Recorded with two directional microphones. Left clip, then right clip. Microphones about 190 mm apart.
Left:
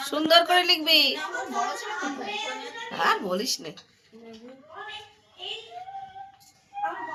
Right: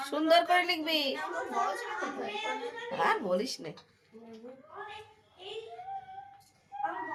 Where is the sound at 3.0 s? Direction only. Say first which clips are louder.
Left 4 dB; 10° left (ahead or behind).